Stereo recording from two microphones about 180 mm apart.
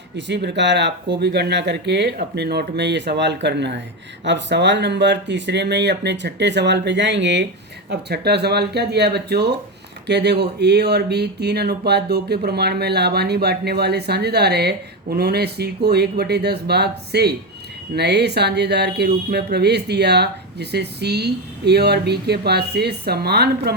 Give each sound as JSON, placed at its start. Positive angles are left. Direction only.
{"t": 0.2, "sound": "speech", "side_deg": -75}
{"t": 7.9, "sound": "speech", "side_deg": -65}